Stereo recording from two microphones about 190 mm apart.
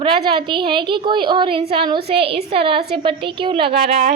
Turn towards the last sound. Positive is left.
turn(degrees=-30)  # may be behind; listen again after turning